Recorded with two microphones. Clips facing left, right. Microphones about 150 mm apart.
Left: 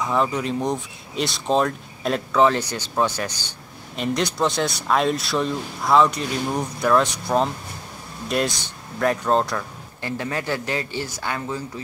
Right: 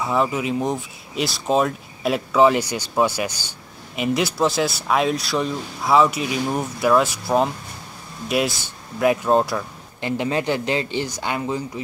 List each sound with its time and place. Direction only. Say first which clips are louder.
0.0 s speech: right 1 dB; 5° right (ahead or behind)
10.0 s speech: right 4 dB; 20° right (ahead or behind)